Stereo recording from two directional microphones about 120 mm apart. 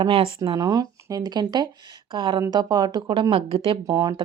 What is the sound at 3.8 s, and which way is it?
Speech, 30° right (ahead or behind).